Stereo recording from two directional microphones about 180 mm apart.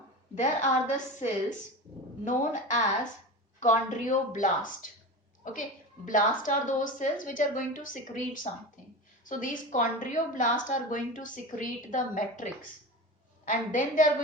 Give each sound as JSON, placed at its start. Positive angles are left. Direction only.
{"t": 0.3, "sound": "a woman's voice", "side_deg": 40}
{"t": 6.1, "sound": "a woman's voice", "side_deg": 45}